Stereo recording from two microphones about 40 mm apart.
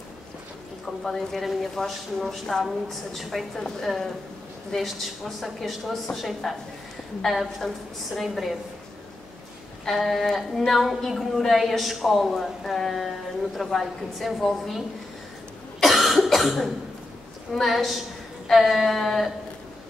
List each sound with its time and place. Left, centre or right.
1.0 s a woman's voice: centre
3.5 s a sound: centre
4.7 s a woman's voice: centre
9.8 s a sound: centre
10.7 s a woman's voice: centre
13.6 s a sound: centre
14.2 s a woman's voice: centre
15.8 s cough: centre
17.6 s a woman's voice: centre